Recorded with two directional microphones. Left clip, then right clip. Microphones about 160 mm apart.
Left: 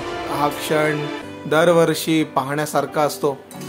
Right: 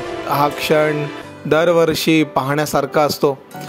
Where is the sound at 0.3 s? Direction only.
45° right (ahead or behind).